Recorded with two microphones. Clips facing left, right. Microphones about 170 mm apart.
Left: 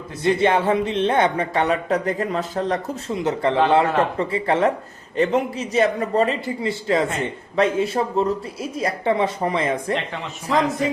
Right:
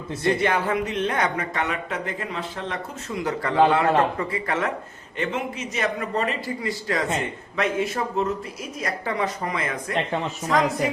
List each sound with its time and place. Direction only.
0.2 s speech: 25° left (ahead or behind); by 2.8 s 40° left (ahead or behind)
3.1 s a man's voice: 25° left (ahead or behind)